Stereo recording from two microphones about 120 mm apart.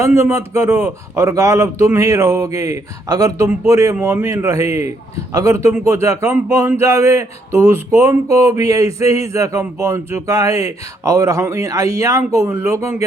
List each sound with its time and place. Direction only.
0.0 s speech: 20° right (ahead or behind)